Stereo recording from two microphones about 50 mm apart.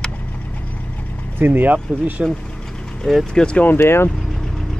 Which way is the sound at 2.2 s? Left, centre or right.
Centre.